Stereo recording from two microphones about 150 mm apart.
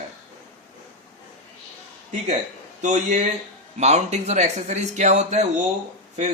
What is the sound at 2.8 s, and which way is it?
A man's voice, 55° right (ahead or behind).